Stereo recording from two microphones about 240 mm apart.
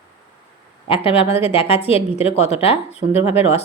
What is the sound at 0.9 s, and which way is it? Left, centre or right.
A woman's voice, left.